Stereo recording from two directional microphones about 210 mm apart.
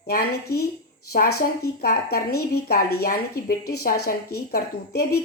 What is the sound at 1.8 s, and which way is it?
A woman's voice, 45° left (ahead or behind).